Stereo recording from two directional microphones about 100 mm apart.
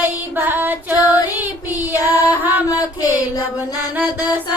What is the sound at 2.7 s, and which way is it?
Child singing, 35° left (ahead or behind).